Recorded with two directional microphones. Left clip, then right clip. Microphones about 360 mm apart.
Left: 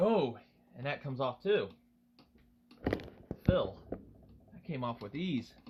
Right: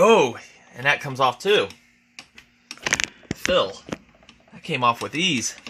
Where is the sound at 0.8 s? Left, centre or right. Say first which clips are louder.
Right 16 dB; right.